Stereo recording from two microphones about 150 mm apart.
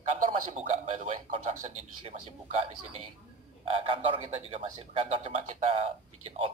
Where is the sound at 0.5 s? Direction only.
50° right (ahead or behind).